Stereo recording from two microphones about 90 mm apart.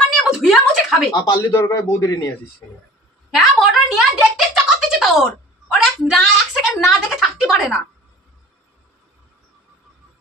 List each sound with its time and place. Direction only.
0.1 s a sound: centre (ahead or behind)
1.1 s speech: 45° left (ahead or behind)
3.3 s music: centre (ahead or behind)
6.0 s speech: centre (ahead or behind)